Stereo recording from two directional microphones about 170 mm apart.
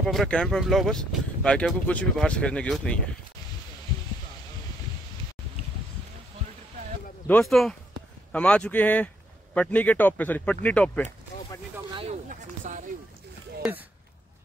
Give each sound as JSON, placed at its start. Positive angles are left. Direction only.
{"t": 0.0, "sound": "speech", "side_deg": 0}
{"t": 7.2, "sound": "speech", "side_deg": 5}
{"t": 12.1, "sound": "speech", "side_deg": -50}